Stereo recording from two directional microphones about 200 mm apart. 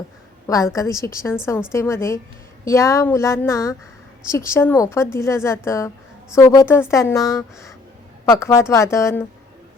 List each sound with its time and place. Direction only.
0.4 s a woman's voice: 15° left (ahead or behind)